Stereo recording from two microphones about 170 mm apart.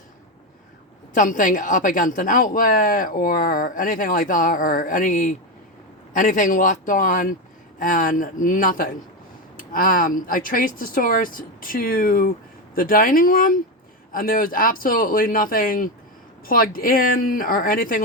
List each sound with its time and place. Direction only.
1.1 s speech: 50° left (ahead or behind)